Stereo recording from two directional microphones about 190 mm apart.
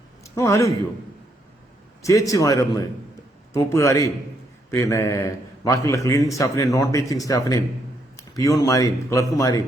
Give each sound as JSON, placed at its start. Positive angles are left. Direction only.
{"t": 0.3, "sound": "a man's voice", "side_deg": 15}
{"t": 2.0, "sound": "a man's voice", "side_deg": 15}